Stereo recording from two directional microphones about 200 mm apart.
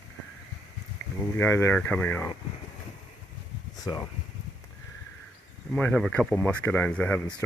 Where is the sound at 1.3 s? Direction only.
10° left (ahead or behind).